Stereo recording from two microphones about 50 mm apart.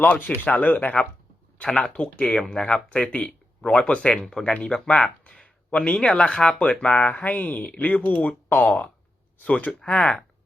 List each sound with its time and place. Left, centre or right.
0.0 s speech: left
1.6 s speech: centre
4.1 s speech: centre; by 8.7 s left
9.8 s speech: left